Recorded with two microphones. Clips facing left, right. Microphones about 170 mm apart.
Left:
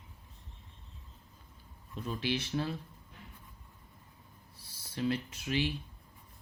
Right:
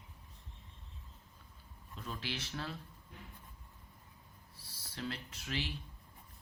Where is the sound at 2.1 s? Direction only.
15° left (ahead or behind).